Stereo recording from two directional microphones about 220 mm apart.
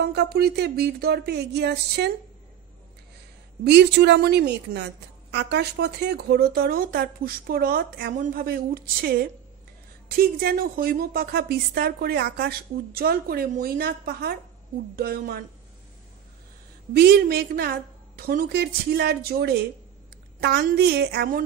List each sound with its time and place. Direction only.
0.0 s a woman's voice: 45° right (ahead or behind)
3.6 s a woman's voice: 50° right (ahead or behind)
16.9 s a woman's voice: 45° right (ahead or behind)